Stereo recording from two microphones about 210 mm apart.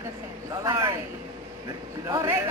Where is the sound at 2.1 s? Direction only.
15° right (ahead or behind).